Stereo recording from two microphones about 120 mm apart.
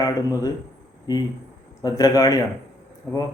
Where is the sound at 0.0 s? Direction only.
30° left (ahead or behind).